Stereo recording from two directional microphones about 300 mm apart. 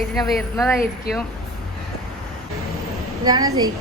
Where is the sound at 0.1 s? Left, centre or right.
Centre.